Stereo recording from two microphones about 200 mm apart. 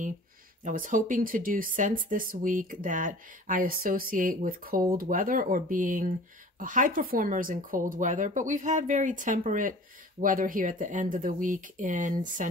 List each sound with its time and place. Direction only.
0.7 s speech: 40° right (ahead or behind)